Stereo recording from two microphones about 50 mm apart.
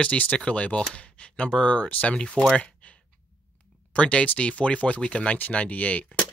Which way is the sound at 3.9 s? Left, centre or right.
Left.